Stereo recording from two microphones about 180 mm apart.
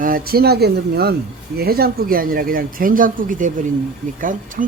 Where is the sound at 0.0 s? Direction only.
55° right (ahead or behind).